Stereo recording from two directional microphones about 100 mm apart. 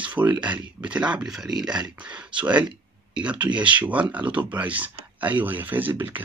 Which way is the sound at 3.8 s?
15° right (ahead or behind).